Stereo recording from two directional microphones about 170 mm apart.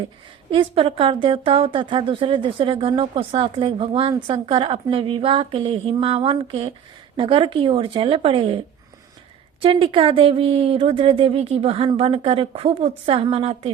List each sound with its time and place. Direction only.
0.5 s speech: 30° right (ahead or behind)
9.6 s speech: 30° right (ahead or behind)